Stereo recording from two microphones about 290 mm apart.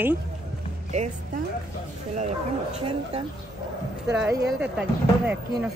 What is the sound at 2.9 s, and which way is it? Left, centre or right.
Speech, centre.